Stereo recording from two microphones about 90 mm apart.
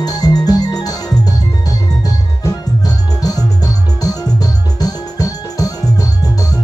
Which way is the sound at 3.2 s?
45° left (ahead or behind).